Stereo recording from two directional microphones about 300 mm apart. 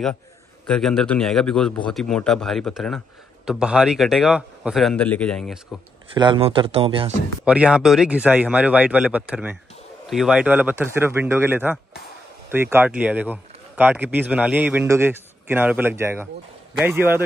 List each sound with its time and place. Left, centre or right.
0.7 s speech: centre
6.1 s speech: centre
7.4 s speech: centre